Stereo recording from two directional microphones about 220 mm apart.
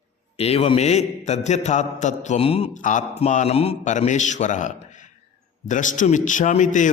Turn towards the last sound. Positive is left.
turn(degrees=35)  # may be behind; listen again after turning